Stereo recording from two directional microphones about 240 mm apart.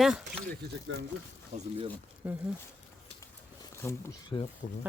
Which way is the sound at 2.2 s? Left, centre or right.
Centre.